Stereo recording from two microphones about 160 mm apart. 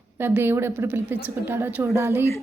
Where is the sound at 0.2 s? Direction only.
15° right (ahead or behind).